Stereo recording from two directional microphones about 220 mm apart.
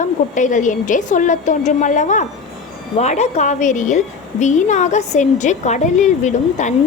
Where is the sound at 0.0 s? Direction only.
35° left (ahead or behind).